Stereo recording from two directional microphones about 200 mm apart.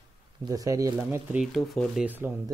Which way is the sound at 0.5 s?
15° right (ahead or behind).